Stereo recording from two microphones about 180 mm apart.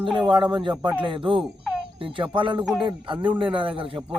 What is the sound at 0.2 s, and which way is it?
Speech, 25° right (ahead or behind).